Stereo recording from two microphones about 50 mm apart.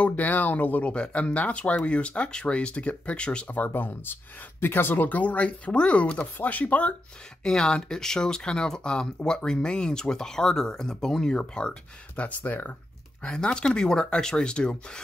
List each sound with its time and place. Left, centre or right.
0.0 s speech: left
0.9 s speech: left
3.5 s speech: left
7.4 s speech: centre
12.2 s speech: left
13.2 s speech: centre